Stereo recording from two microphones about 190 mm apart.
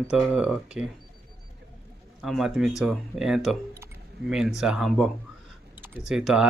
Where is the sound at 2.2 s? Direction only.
Centre (ahead or behind).